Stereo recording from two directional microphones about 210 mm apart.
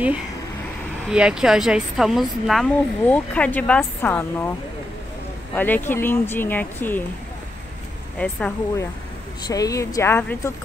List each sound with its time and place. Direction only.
1.1 s speech: 5° right (ahead or behind)
5.5 s speech: 10° left (ahead or behind)
8.2 s speech: 5° left (ahead or behind)